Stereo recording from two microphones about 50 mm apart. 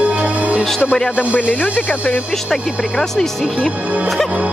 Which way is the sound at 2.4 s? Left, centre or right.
Centre.